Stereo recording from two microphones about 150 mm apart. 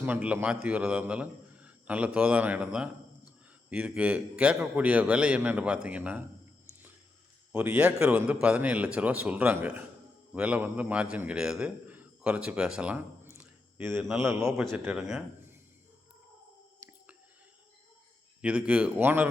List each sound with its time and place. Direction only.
0.0 s a man's voice: 10° right (ahead or behind)
7.5 s a man's voice: 10° right (ahead or behind)
13.3 s a sound: 15° right (ahead or behind)
14.2 s a man's voice: 15° right (ahead or behind)
18.4 s a man's voice: 10° right (ahead or behind)